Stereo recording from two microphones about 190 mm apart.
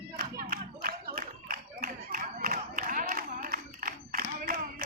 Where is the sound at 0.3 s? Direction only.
50° right (ahead or behind).